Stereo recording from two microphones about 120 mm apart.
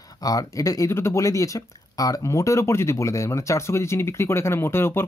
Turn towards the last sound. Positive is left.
turn(degrees=20)  # may be behind; listen again after turning